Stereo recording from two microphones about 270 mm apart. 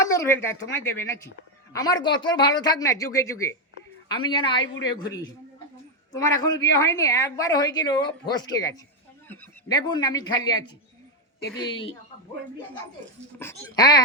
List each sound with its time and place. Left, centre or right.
0.0 s a woman's voice: centre
6.1 s a woman's voice: centre
13.4 s a woman's voice: centre